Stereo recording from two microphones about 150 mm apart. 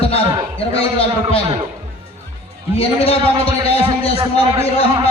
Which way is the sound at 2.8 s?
40° left (ahead or behind).